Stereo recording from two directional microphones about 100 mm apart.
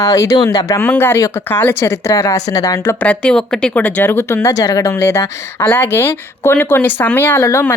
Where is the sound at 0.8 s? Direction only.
20° left (ahead or behind).